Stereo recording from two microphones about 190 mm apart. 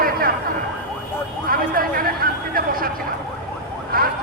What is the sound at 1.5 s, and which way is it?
Chatter, 50° right (ahead or behind).